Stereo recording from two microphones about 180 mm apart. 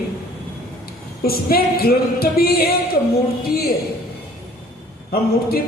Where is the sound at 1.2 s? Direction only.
60° left (ahead or behind).